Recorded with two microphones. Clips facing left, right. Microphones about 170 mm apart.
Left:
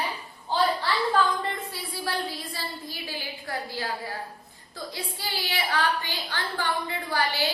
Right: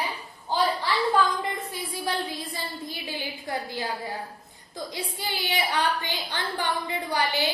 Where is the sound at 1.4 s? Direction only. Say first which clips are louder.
Right 1 dB; 15° right (ahead or behind).